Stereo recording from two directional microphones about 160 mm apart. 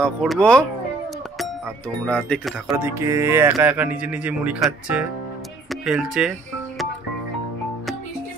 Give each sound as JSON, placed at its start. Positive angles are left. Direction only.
{"t": 0.0, "sound": "speech", "side_deg": 5}
{"t": 2.0, "sound": "speech", "side_deg": 5}
{"t": 2.8, "sound": "speech", "side_deg": -15}